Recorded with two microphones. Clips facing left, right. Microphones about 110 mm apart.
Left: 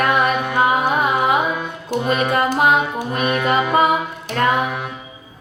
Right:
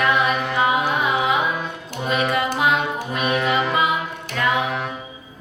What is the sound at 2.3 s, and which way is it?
Music, 45° left (ahead or behind).